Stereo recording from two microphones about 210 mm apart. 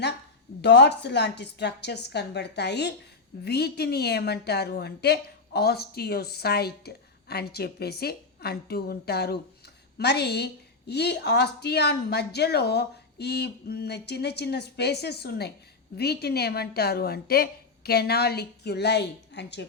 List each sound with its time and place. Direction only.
0.6 s a woman's voice: 55° left (ahead or behind)